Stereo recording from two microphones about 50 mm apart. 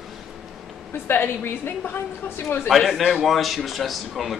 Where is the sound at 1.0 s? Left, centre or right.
Left.